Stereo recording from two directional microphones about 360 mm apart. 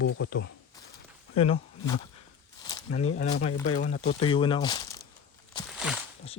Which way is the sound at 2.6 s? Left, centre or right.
Centre.